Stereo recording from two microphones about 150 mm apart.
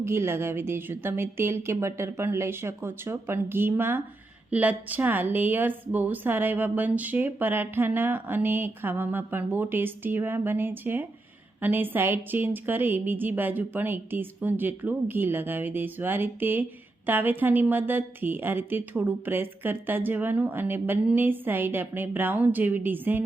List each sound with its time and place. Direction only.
0.0 s a woman's voice: 15° right (ahead or behind)